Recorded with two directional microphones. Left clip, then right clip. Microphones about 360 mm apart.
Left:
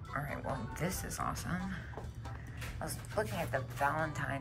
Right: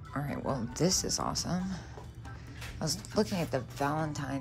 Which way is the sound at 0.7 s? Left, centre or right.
Centre.